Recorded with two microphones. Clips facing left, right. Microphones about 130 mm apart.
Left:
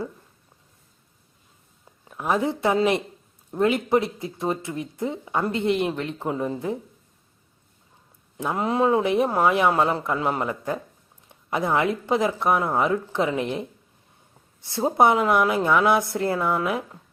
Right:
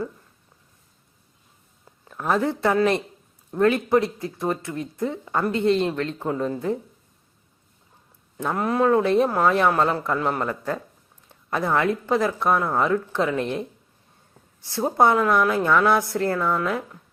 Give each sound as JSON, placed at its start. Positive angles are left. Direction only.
{"t": 2.0, "sound": "speech", "side_deg": 10}
{"t": 8.5, "sound": "speech", "side_deg": 20}